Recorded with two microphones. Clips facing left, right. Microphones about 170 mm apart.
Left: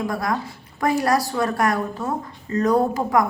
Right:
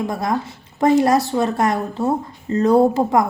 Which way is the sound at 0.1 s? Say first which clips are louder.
Right 3 dB; 25° right (ahead or behind).